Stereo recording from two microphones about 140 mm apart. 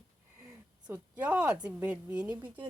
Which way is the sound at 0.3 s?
10° right (ahead or behind).